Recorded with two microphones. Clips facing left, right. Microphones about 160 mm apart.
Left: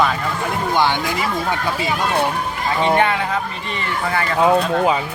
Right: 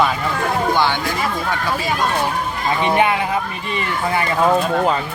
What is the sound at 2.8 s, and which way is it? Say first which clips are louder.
Speech: even; 15° right (ahead or behind).